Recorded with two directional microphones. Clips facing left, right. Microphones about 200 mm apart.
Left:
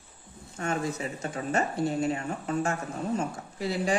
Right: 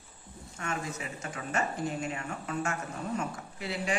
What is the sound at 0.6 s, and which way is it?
Speech, 35° left (ahead or behind).